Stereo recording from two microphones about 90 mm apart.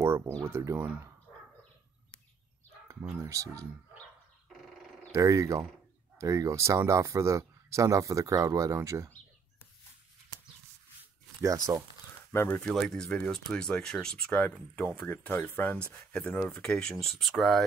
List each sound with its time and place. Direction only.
0.4 s speech: 30° right (ahead or behind)
3.2 s speech: 35° right (ahead or behind)
5.1 s speech: 35° right (ahead or behind)
11.4 s speech: 45° right (ahead or behind)
12.3 s speech: 25° left (ahead or behind)
12.5 s speech: 5° left (ahead or behind)